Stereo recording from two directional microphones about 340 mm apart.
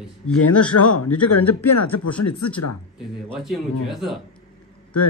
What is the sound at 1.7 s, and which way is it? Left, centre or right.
Speech, left.